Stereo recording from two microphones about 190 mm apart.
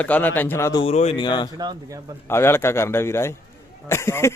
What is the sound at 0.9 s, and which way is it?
Speech, 35° left (ahead or behind).